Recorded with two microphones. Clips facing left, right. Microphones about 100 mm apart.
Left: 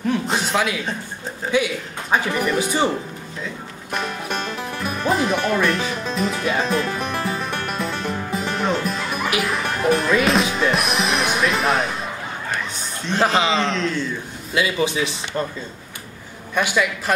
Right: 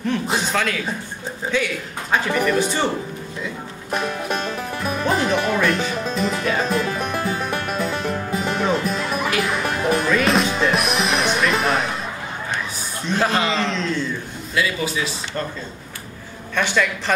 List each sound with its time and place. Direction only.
0.0 s music: 5° left (ahead or behind)
1.5 s speech: 15° left (ahead or behind)
3.9 s music: centre (ahead or behind)
13.2 s speech: 15° left (ahead or behind)
13.5 s music: centre (ahead or behind)
14.5 s speech: 20° left (ahead or behind)
16.5 s speech: 10° left (ahead or behind)